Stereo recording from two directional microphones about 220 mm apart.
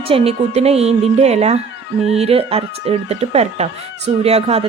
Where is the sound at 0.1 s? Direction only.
30° right (ahead or behind).